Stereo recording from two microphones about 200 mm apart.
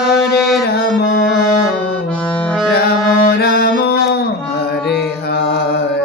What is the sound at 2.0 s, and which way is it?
Accordion, 5° left (ahead or behind).